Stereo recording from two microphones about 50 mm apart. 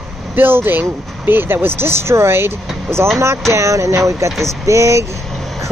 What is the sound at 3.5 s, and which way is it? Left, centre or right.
Speech, right.